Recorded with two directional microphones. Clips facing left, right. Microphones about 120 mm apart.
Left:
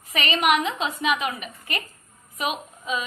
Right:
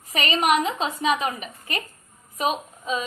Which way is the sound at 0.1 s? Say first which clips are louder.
Right 1 dB; 35° right (ahead or behind).